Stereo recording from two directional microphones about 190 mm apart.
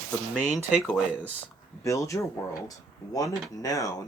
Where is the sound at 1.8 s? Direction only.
15° left (ahead or behind).